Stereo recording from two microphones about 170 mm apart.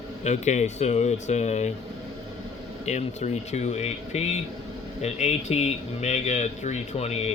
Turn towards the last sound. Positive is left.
turn(degrees=40)  # may be behind; listen again after turning